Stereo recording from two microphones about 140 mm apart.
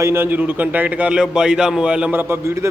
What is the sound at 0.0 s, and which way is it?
A man's voice, 15° right (ahead or behind).